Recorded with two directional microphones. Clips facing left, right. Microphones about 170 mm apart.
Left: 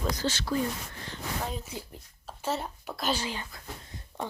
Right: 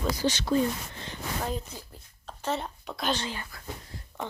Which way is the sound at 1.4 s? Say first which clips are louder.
Right 2 dB; centre (ahead or behind).